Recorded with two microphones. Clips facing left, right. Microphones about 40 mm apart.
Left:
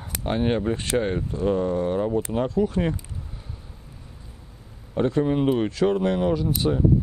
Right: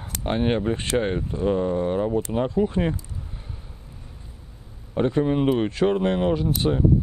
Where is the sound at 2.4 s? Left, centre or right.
Right.